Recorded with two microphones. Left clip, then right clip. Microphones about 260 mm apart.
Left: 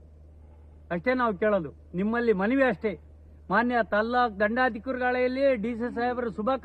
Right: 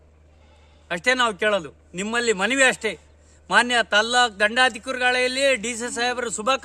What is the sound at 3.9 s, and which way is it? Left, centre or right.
Speech, right.